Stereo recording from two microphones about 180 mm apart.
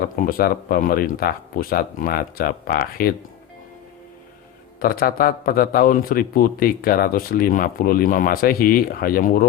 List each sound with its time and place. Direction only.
0.2 s a man's voice: 55° left (ahead or behind)
4.8 s a man's voice: 55° left (ahead or behind)